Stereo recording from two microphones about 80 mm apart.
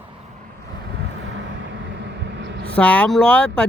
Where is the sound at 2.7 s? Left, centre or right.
Centre.